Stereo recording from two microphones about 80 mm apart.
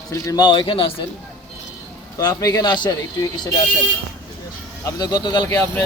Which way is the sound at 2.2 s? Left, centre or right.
Left.